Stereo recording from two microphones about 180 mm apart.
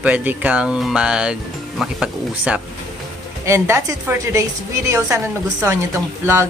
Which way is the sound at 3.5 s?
15° right (ahead or behind).